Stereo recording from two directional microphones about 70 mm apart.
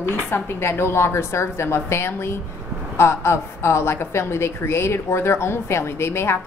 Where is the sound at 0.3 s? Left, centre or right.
Left.